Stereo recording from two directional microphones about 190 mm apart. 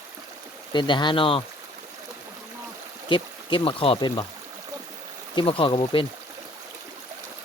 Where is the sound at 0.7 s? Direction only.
25° left (ahead or behind).